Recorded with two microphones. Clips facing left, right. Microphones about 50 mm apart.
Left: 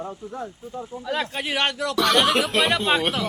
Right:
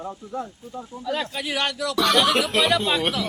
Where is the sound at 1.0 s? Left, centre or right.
Left.